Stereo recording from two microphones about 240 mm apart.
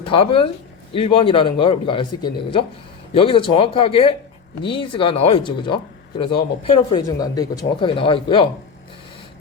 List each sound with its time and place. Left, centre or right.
0.1 s speech: left